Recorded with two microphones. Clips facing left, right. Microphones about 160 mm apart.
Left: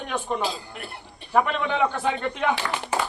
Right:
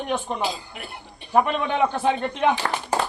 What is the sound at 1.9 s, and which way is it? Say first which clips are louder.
Speech: right 3 dB; 20° right (ahead or behind).